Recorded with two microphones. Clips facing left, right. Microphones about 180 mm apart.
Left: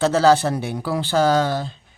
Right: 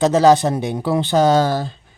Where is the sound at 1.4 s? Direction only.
40° right (ahead or behind).